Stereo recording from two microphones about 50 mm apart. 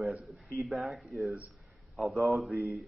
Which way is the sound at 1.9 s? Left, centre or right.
Centre.